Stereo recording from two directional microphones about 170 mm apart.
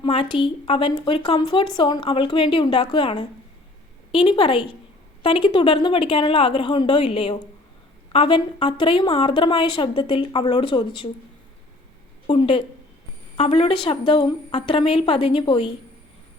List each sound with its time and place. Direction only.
0.0 s a woman's voice: 30° left (ahead or behind)
12.3 s a woman's voice: 30° left (ahead or behind)